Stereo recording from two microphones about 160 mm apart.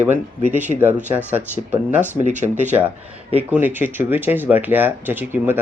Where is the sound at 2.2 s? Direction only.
50° right (ahead or behind).